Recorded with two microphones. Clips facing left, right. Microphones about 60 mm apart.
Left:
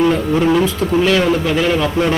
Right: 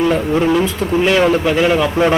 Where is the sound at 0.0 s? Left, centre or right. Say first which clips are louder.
Even; centre.